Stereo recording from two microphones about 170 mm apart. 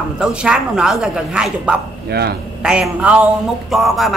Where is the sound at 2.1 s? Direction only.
70° right (ahead or behind).